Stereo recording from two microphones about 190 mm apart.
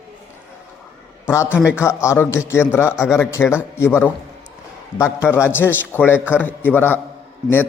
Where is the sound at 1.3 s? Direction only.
15° left (ahead or behind).